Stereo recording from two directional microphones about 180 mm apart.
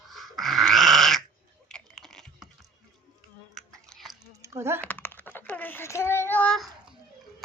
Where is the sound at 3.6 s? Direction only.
Centre (ahead or behind).